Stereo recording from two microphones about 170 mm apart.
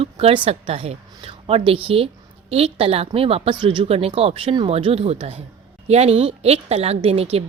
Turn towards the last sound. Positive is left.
turn(degrees=-35)  # may be behind; listen again after turning